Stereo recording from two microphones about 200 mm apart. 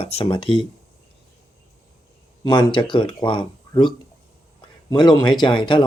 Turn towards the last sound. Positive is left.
turn(degrees=25)  # may be behind; listen again after turning